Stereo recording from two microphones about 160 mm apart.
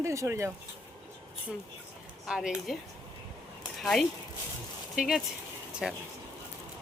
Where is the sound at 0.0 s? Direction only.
20° right (ahead or behind).